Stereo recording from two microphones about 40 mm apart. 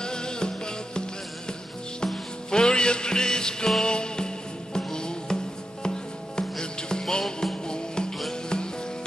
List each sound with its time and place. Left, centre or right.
0.0 s music: centre
2.5 s music: centre